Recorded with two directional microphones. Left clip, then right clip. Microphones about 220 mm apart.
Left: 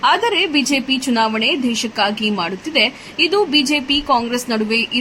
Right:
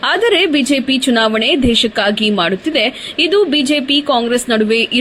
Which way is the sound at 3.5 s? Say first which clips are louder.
Right 1 dB; 55° right (ahead or behind).